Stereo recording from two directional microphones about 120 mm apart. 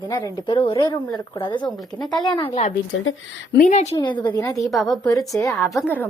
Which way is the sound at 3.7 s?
70° left (ahead or behind).